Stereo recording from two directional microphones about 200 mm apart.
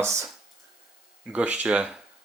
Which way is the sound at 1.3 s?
5° right (ahead or behind).